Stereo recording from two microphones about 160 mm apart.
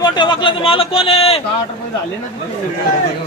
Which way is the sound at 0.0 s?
30° left (ahead or behind).